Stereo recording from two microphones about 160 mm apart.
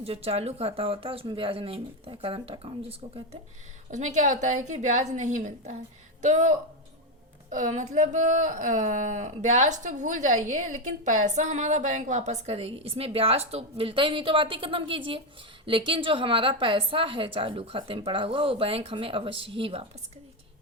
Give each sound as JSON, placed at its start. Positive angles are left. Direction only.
{"t": 0.0, "sound": "a woman's voice", "side_deg": -40}
{"t": 3.9, "sound": "a woman's voice", "side_deg": -50}